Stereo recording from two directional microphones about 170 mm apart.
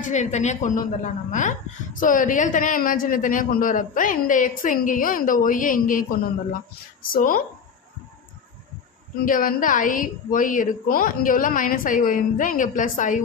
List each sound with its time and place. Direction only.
0.0 s a man's voice: 45° left (ahead or behind)
9.2 s a man's voice: 55° left (ahead or behind)